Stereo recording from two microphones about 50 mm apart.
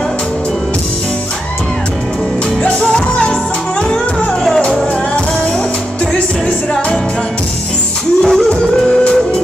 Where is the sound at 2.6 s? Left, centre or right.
Left.